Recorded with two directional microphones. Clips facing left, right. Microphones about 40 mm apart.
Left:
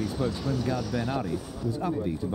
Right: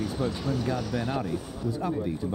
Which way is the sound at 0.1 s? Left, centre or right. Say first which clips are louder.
Even; right.